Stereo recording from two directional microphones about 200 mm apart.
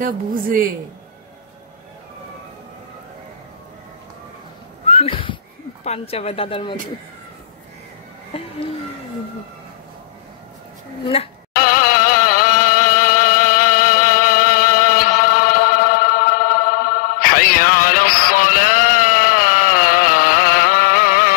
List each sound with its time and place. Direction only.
0.0 s a woman's voice: 45° right (ahead or behind)
4.8 s a sound: 30° left (ahead or behind)
5.9 s speech: 30° left (ahead or behind)
8.3 s a sound: 30° left (ahead or behind)
11.1 s speech: 30° left (ahead or behind)
11.5 s middle eastern music: 45° left (ahead or behind)